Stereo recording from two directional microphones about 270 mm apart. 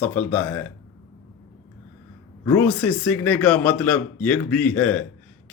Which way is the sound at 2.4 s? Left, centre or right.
Centre.